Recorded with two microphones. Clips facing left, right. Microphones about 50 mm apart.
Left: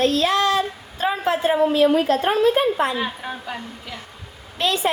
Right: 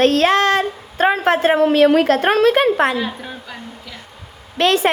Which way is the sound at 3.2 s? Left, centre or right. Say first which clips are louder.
Left 2 dB; centre.